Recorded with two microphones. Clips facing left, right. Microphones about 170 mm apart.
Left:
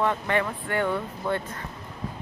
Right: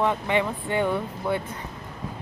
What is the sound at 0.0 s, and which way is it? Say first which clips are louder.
Speech: right 1 dB; 15° right (ahead or behind).